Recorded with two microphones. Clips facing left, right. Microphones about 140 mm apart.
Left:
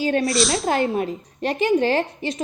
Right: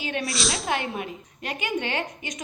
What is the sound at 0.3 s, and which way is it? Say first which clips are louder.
Speech: left 8 dB; centre (ahead or behind).